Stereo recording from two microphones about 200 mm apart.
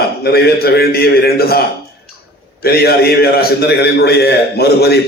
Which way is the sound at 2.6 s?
50° left (ahead or behind).